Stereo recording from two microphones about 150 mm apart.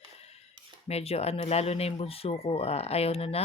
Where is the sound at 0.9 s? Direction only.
45° left (ahead or behind).